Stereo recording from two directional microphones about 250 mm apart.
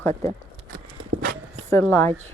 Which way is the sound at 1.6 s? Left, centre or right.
Centre.